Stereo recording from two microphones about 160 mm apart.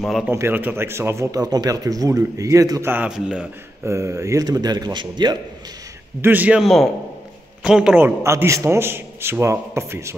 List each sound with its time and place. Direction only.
0.0 s a man's voice: centre (ahead or behind)
0.3 s speech: 15° right (ahead or behind)
2.9 s a man's voice: 10° right (ahead or behind)
3.8 s speech: 20° right (ahead or behind)
6.2 s a man's voice: 10° right (ahead or behind)
8.2 s a man's voice: 20° right (ahead or behind)